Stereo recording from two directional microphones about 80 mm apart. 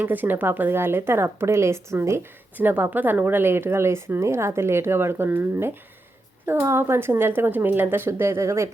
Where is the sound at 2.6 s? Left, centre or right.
Right.